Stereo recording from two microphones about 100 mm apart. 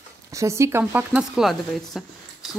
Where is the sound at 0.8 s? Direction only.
15° right (ahead or behind).